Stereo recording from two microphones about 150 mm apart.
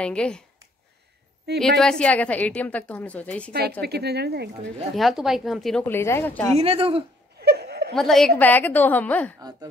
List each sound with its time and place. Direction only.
0.0 s a woman's voice: 5° left (ahead or behind)
1.5 s speech: 90° right
1.8 s a woman's voice: 5° left (ahead or behind)
3.8 s speech: 90° right
4.9 s speech: centre (ahead or behind)
5.9 s a woman's voice: 15° left (ahead or behind)
6.5 s speech: 40° right (ahead or behind)
7.3 s laughter: 90° right
7.9 s a woman's voice: 5° left (ahead or behind)
9.4 s speech: 25° right (ahead or behind)